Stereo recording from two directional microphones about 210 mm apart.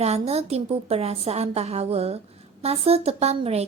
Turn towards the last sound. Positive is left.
turn(degrees=-30)  # may be behind; listen again after turning